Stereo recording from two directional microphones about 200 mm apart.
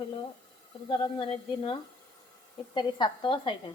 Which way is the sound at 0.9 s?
25° left (ahead or behind).